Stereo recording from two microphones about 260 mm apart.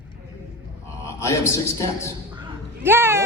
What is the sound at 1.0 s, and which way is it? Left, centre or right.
A man's voice, centre.